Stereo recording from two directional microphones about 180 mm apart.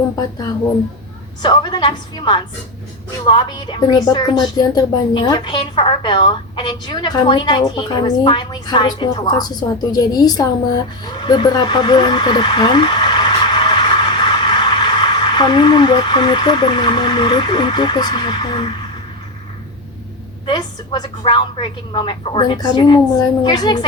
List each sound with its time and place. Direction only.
1.4 s a woman's voice: 25° left (ahead or behind)
20.5 s a woman's voice: 25° left (ahead or behind)